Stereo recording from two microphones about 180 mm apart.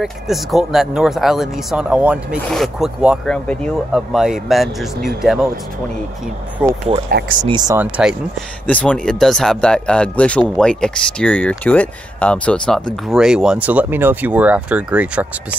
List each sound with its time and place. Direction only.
0.0 s speech: centre (ahead or behind)
7.1 s speech: 55° right (ahead or behind)
7.4 s speech: 20° right (ahead or behind)
7.8 s speech: 5° right (ahead or behind)
8.6 s speech: 5° left (ahead or behind)